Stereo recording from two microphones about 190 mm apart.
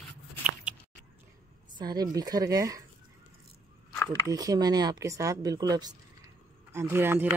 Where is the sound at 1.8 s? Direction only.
20° right (ahead or behind).